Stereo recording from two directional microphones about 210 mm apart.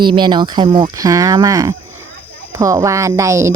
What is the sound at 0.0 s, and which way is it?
A woman's voice, 20° right (ahead or behind).